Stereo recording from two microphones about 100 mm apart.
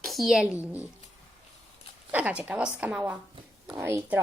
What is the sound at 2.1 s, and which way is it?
A woman's voice, 15° right (ahead or behind).